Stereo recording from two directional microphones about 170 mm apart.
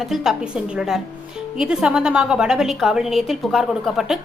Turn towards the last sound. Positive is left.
turn(degrees=0)  # may be behind; listen again after turning